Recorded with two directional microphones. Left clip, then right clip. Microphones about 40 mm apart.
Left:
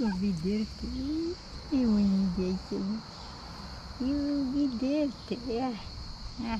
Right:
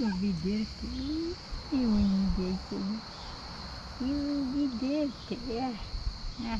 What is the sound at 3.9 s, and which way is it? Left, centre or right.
Speech, left.